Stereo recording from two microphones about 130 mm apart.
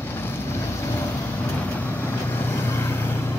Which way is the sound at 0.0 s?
15° left (ahead or behind).